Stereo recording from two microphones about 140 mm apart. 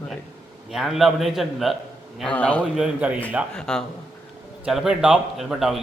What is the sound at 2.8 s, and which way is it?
Speech, 10° right (ahead or behind).